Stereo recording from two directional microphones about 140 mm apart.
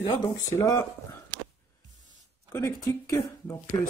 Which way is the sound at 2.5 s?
20° left (ahead or behind).